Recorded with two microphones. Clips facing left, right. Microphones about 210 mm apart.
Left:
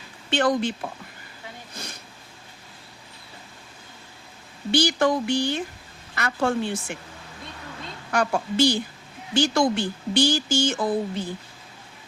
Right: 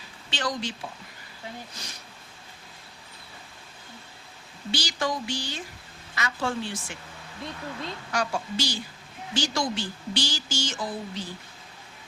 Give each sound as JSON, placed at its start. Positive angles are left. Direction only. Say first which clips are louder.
{"t": 0.3, "sound": "speech", "louder": "left 9 dB", "side_deg": 55}
{"t": 1.7, "sound": "a sound", "louder": "left 5 dB", "side_deg": 55}
{"t": 4.7, "sound": "speech", "louder": "left 9 dB", "side_deg": 55}
{"t": 8.1, "sound": "speech", "louder": "left 6 dB", "side_deg": 55}